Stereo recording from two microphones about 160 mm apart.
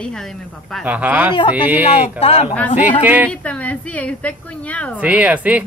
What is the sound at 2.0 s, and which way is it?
Speech, 40° left (ahead or behind).